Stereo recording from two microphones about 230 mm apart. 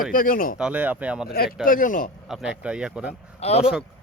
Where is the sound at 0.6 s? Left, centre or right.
Centre.